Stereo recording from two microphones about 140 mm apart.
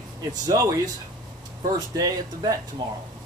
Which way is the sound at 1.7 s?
30° right (ahead or behind).